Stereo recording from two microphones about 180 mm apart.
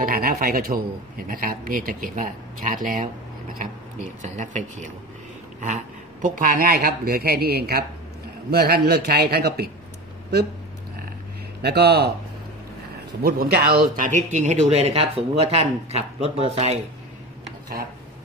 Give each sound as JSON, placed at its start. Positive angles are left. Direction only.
{"t": 0.0, "sound": "speech", "side_deg": -55}
{"t": 4.2, "sound": "speech", "side_deg": -45}
{"t": 6.2, "sound": "speech", "side_deg": -50}
{"t": 11.6, "sound": "speech", "side_deg": -65}
{"t": 13.2, "sound": "a man's voice", "side_deg": -60}